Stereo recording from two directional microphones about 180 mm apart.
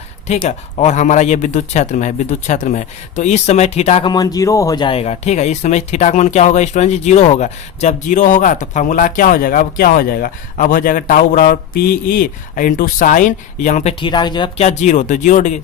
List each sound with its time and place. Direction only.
0.4 s speech: 40° left (ahead or behind)
4.0 s speech: 20° left (ahead or behind); by 13.9 s 40° left (ahead or behind)
14.0 s speech: 25° left (ahead or behind); by 15.6 s 40° left (ahead or behind)